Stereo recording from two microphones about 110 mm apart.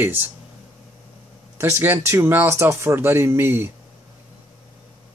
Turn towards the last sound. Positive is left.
turn(degrees=-20)  # may be behind; listen again after turning